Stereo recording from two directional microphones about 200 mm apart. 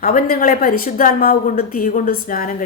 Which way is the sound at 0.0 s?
45° left (ahead or behind).